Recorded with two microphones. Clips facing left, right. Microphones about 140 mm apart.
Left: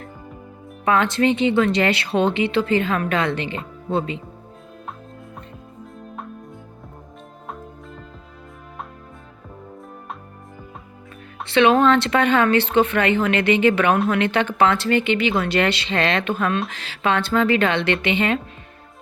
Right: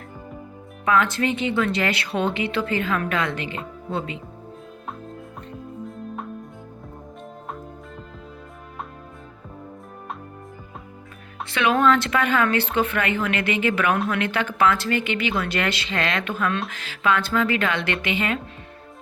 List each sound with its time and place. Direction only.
0.9 s a woman's voice: 25° left (ahead or behind)
11.4 s a woman's voice: 25° left (ahead or behind)